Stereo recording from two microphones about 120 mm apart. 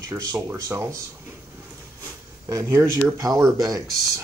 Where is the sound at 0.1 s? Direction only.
25° right (ahead or behind).